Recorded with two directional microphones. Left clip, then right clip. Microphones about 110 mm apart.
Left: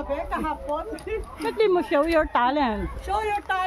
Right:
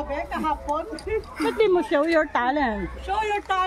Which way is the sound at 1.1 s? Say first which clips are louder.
Right 5 dB; 25° left (ahead or behind).